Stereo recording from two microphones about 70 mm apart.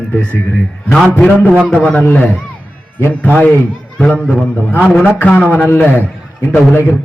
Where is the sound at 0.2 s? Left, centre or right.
Centre.